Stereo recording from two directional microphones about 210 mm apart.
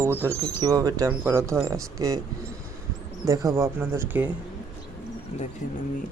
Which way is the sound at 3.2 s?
15° right (ahead or behind).